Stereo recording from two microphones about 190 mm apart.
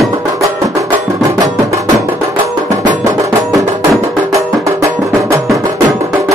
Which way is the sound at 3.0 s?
15° right (ahead or behind).